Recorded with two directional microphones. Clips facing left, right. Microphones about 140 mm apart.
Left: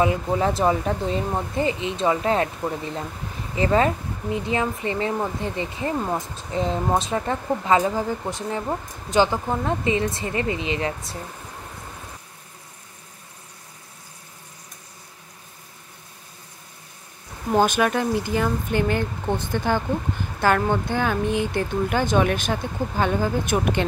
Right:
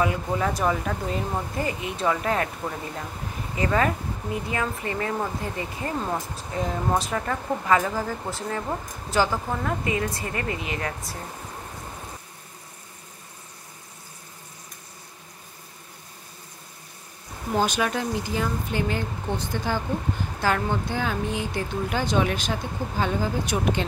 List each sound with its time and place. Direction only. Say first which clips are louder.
0.0 s speech: left 4 dB; 25° left (ahead or behind)
3.5 s speech: left 4 dB; 25° left (ahead or behind)
17.6 s speech: left 5 dB; 55° left (ahead or behind)